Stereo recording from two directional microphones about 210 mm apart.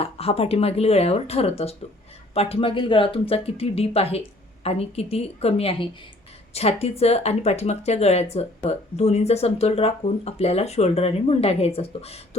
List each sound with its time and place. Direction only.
0.0 s speech: 25° left (ahead or behind)